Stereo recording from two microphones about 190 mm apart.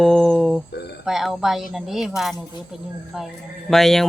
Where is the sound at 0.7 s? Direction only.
60° left (ahead or behind).